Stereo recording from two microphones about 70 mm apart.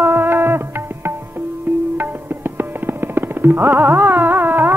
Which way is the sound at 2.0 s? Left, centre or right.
Right.